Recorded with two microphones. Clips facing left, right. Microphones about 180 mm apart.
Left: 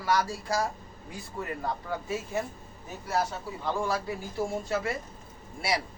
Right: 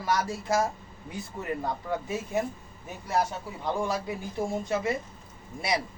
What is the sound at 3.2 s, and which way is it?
A man's voice, 20° right (ahead or behind).